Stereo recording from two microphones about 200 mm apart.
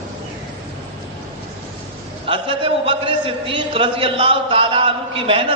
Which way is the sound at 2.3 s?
25° right (ahead or behind).